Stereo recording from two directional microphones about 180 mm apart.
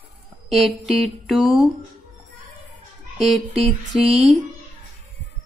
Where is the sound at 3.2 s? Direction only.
Centre (ahead or behind).